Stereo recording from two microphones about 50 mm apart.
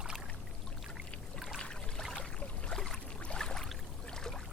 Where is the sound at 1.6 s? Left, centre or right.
Centre.